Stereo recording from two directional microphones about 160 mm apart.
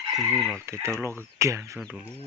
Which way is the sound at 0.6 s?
15° right (ahead or behind).